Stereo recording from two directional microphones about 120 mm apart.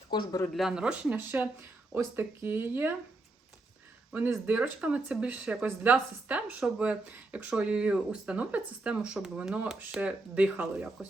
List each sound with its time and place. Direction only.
0.1 s speech: 35° left (ahead or behind)
0.5 s speech: 5° right (ahead or behind)
4.4 s speech: 10° right (ahead or behind)